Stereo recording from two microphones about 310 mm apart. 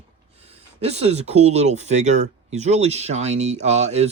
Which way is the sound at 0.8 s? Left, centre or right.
Centre.